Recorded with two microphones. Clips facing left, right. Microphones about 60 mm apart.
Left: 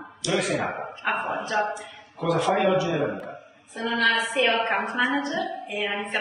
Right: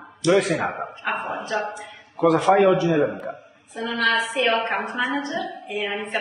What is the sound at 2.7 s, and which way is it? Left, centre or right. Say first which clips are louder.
Speech: right 4 dB; right.